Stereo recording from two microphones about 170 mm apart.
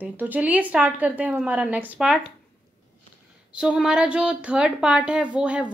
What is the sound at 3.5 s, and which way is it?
A woman's voice, 5° right (ahead or behind).